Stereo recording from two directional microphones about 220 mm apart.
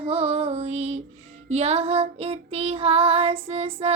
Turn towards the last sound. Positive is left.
turn(degrees=-25)  # may be behind; listen again after turning